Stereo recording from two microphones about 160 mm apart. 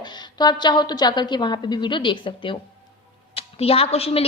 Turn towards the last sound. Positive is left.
turn(degrees=40)  # may be behind; listen again after turning